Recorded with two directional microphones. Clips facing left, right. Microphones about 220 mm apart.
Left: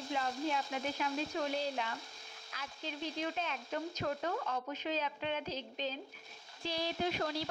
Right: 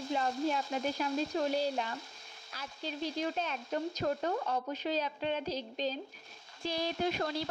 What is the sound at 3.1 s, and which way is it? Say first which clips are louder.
A woman's voice: right 3 dB; 40° right (ahead or behind).